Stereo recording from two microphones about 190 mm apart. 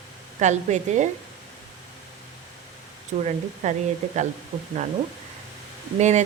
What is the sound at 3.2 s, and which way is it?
Speech, 40° right (ahead or behind).